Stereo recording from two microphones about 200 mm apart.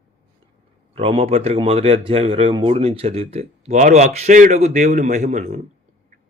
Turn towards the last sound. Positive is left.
turn(degrees=-35)  # may be behind; listen again after turning